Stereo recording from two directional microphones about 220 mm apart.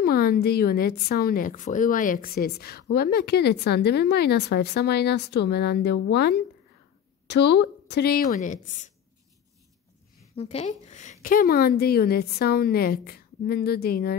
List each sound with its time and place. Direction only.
0.0 s a woman's voice: 40° left (ahead or behind)
10.3 s a woman's voice: 30° left (ahead or behind); by 14.1 s 45° left (ahead or behind)